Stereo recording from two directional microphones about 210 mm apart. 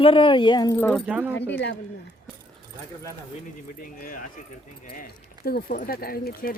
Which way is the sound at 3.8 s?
40° left (ahead or behind).